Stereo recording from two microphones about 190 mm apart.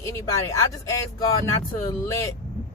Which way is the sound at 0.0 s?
15° left (ahead or behind).